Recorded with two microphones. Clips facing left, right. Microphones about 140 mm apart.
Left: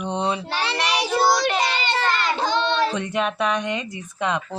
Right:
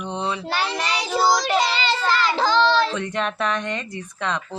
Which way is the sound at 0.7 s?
75° left (ahead or behind).